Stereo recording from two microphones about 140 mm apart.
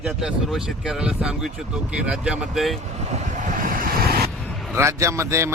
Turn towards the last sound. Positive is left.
turn(degrees=-20)  # may be behind; listen again after turning